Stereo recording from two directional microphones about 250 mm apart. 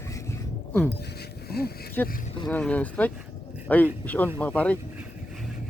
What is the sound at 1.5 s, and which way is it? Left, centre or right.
Speech, left.